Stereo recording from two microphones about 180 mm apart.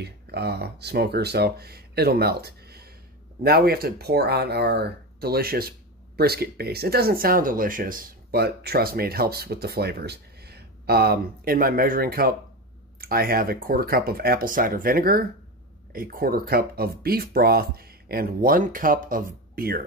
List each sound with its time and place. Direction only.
0.0 s speech: 65° right (ahead or behind)